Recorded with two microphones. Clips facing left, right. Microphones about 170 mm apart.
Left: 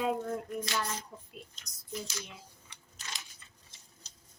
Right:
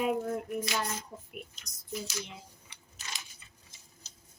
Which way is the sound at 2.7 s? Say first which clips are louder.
Even; 10° right (ahead or behind).